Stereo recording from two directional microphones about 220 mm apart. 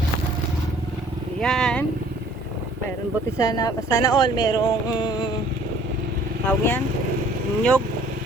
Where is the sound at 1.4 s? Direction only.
Centre (ahead or behind).